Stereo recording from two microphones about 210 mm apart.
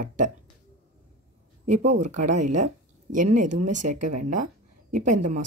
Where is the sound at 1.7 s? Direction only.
35° right (ahead or behind).